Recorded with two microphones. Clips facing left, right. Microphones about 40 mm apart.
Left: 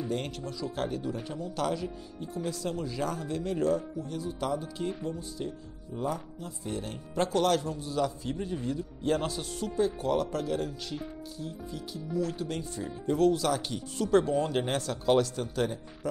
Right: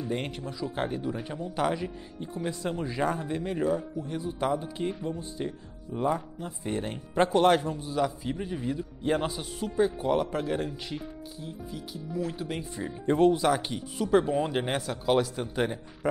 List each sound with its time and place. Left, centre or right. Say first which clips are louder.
0.1 s speech: right 1 dB; centre
7.8 s a man's voice: right 2 dB; centre
13.0 s speech: right 3 dB; right
13.3 s a man's voice: right 3 dB; right